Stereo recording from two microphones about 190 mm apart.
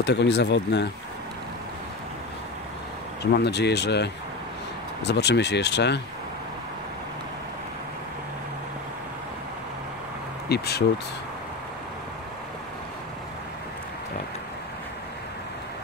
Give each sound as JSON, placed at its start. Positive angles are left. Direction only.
{"t": 0.0, "sound": "speech", "side_deg": 65}
{"t": 3.2, "sound": "speech", "side_deg": 60}
{"t": 10.5, "sound": "speech", "side_deg": 60}